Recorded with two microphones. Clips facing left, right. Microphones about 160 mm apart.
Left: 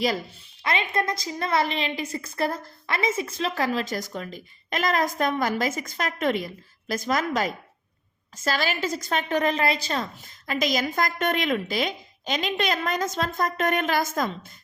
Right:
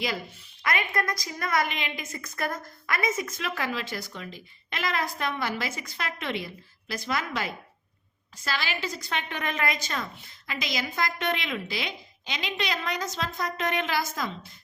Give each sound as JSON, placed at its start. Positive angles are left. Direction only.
{"t": 0.6, "sound": "a woman's voice", "side_deg": 25}